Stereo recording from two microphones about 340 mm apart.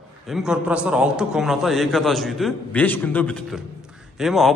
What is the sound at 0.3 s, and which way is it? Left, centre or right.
A man's voice, centre.